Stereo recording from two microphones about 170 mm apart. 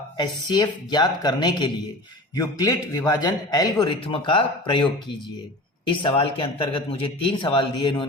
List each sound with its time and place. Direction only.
0.2 s a man's voice: 25° left (ahead or behind)
5.9 s a man's voice: 30° left (ahead or behind)